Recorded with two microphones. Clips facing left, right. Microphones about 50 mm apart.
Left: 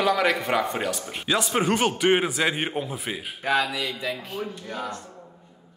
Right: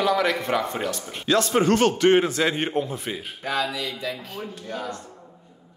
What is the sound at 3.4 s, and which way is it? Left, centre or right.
Speech, left.